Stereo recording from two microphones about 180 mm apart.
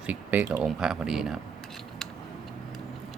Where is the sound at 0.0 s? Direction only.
10° right (ahead or behind).